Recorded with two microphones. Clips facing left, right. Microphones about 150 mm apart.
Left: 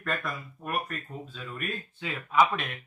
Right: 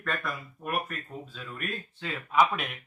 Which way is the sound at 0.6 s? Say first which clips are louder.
Even; 5° right (ahead or behind).